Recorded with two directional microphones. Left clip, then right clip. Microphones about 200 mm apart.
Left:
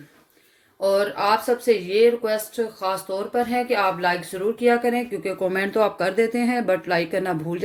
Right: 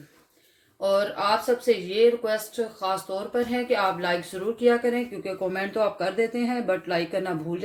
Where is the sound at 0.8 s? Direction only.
30° left (ahead or behind).